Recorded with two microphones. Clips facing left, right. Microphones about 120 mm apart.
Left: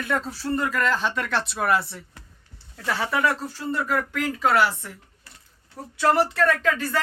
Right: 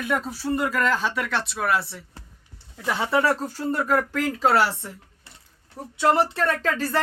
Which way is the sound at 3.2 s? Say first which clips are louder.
Right 1 dB; 40° right (ahead or behind).